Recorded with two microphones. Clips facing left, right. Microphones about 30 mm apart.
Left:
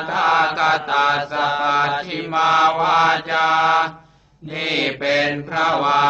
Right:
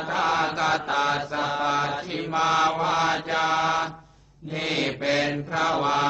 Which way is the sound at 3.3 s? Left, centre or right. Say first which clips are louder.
Left 7 dB; left.